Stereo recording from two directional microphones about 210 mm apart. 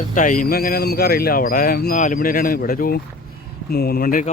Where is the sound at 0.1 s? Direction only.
40° left (ahead or behind).